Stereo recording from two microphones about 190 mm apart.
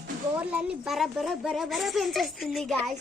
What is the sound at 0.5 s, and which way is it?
A woman's voice, centre (ahead or behind).